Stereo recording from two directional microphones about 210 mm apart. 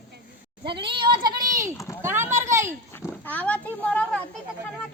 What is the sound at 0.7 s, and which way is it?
Speech, 25° right (ahead or behind).